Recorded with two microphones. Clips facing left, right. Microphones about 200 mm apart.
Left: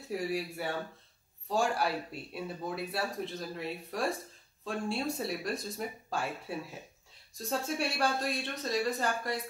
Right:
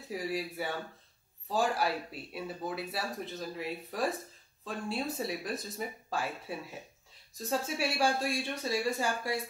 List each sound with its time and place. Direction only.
0.1 s speech: centre (ahead or behind)